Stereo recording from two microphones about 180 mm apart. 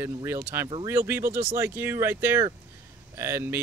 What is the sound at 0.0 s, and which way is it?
Speech, 15° right (ahead or behind).